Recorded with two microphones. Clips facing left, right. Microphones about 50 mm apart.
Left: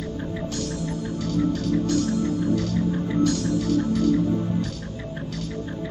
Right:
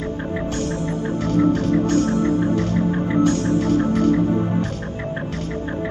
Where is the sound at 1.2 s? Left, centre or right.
Right.